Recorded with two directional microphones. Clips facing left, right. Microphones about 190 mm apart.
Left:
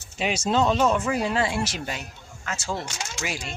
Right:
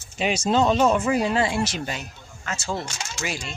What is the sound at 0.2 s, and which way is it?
Speech, 5° left (ahead or behind).